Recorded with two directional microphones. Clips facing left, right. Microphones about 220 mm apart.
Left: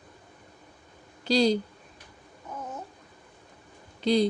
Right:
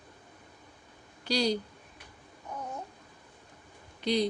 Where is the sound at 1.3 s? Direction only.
25° left (ahead or behind).